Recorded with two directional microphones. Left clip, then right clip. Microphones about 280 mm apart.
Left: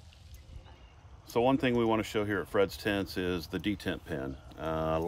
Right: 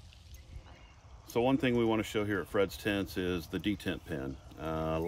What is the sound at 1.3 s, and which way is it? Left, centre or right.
Speech, centre.